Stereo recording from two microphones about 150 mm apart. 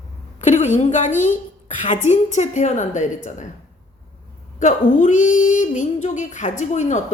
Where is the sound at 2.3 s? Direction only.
55° left (ahead or behind).